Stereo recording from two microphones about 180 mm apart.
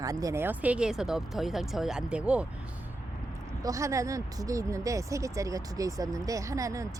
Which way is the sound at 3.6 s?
15° right (ahead or behind).